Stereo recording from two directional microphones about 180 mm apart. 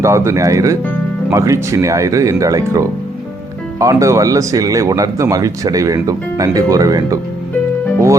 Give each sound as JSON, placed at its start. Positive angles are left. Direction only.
{"t": 0.0, "sound": "speech", "side_deg": -15}